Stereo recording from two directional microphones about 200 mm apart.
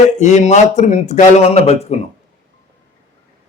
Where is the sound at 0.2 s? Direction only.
35° left (ahead or behind).